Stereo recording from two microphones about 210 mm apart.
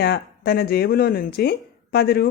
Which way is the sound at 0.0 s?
50° left (ahead or behind).